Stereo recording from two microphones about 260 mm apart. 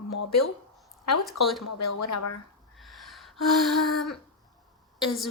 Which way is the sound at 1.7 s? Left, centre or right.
Left.